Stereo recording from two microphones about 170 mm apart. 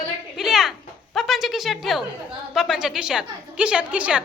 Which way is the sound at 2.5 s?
5° right (ahead or behind).